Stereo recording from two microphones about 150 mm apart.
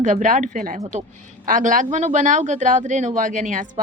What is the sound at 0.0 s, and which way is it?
Speech, 55° right (ahead or behind).